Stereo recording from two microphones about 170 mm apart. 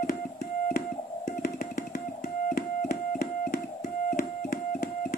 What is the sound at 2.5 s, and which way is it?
Music, 60° left (ahead or behind).